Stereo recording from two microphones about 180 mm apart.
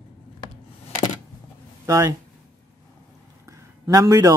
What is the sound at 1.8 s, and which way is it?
Speech, 15° right (ahead or behind).